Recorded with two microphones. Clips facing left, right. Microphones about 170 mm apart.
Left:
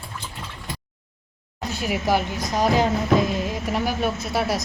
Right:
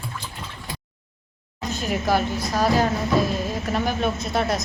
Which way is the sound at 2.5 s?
20° left (ahead or behind).